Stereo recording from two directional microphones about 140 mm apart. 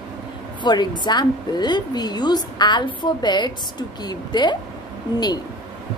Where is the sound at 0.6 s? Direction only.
30° left (ahead or behind).